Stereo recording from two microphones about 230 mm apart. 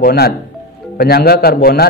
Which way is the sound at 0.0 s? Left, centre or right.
Left.